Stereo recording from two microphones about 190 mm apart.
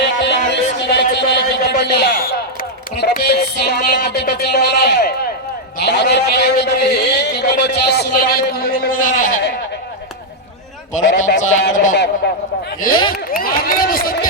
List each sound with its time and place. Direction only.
0.0 s music: 65° left (ahead or behind)
7.9 s speech: 55° left (ahead or behind)
11.3 s speech: 40° left (ahead or behind)
12.2 s music: 65° left (ahead or behind)
12.8 s speech: 45° left (ahead or behind)
13.3 s a sound: 50° left (ahead or behind)